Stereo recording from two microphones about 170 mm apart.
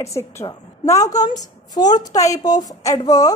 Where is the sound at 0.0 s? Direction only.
15° left (ahead or behind).